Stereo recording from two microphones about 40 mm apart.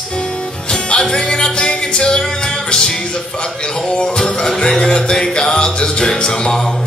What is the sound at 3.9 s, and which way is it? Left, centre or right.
Music, left.